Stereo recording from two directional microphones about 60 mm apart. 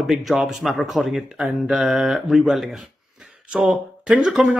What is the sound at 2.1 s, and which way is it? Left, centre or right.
Speech, centre.